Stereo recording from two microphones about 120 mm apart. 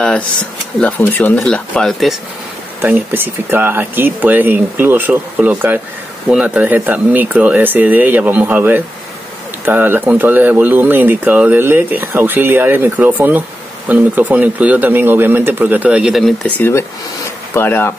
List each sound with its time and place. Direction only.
0.7 s speech: 15° left (ahead or behind)
2.8 s speech: 15° right (ahead or behind)
16.4 s speech: 15° left (ahead or behind)